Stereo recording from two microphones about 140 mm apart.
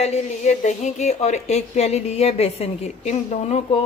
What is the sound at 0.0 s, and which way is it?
A woman's voice, 55° left (ahead or behind).